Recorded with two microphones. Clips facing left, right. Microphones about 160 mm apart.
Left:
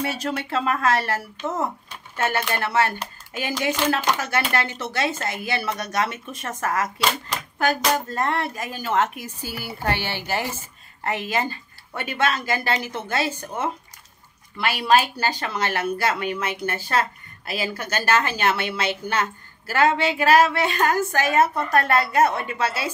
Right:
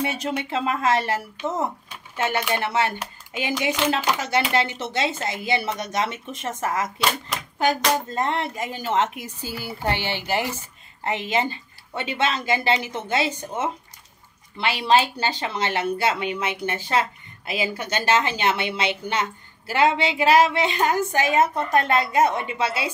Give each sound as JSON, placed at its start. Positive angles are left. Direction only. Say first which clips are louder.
{"t": 0.0, "sound": "a woman's voice", "louder": "even", "side_deg": -20}
{"t": 7.0, "sound": "speech", "louder": "even", "side_deg": -5}
{"t": 8.1, "sound": "a woman's voice", "louder": "even", "side_deg": -20}